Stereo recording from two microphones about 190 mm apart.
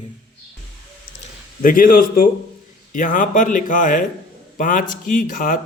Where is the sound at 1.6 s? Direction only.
45° left (ahead or behind).